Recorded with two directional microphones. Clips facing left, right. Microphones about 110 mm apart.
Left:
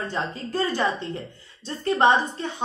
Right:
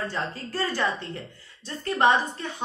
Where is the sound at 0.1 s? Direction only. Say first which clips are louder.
Left 3 dB; 20° left (ahead or behind).